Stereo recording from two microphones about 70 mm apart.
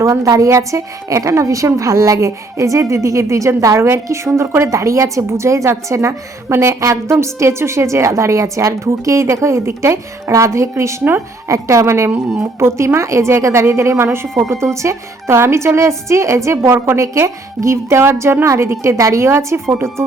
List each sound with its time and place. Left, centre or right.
0.0 s a woman's voice: right